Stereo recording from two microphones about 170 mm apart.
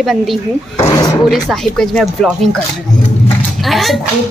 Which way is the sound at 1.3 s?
Centre (ahead or behind).